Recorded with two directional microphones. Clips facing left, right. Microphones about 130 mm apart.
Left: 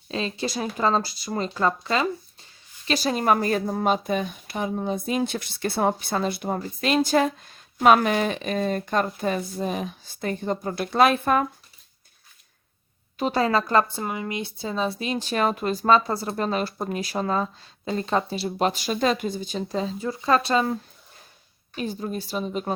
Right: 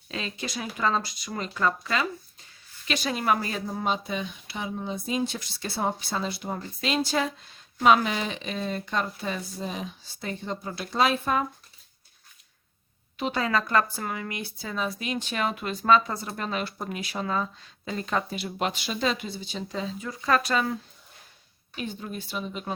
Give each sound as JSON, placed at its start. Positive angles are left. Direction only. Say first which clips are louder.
{"t": 0.1, "sound": "speech", "louder": "left 6 dB", "side_deg": 30}
{"t": 13.1, "sound": "speech", "louder": "left 5 dB", "side_deg": 40}
{"t": 13.9, "sound": "speech", "louder": "left 4 dB", "side_deg": 20}
{"t": 21.8, "sound": "speech", "louder": "left 5 dB", "side_deg": 40}